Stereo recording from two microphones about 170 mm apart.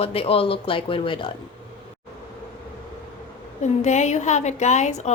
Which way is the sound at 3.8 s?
45° left (ahead or behind).